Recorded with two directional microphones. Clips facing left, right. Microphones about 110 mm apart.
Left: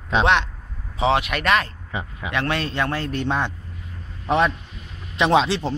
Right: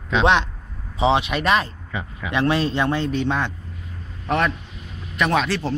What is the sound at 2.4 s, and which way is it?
Speech, 5° right (ahead or behind).